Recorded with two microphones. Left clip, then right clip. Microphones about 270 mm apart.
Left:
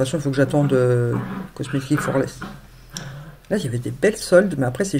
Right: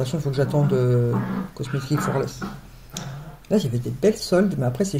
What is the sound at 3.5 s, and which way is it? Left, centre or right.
Speech, left.